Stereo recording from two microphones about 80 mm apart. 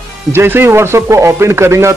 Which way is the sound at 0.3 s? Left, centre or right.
Right.